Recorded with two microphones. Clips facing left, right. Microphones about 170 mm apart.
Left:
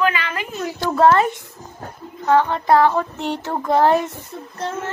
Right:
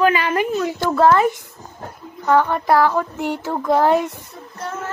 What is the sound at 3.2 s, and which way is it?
A woman's voice, 10° right (ahead or behind).